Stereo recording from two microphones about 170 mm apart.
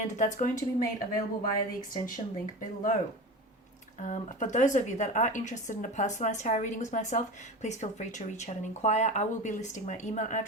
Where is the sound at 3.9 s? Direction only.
45° left (ahead or behind).